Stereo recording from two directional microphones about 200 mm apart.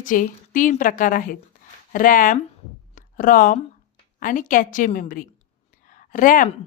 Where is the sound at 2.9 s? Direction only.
40° left (ahead or behind).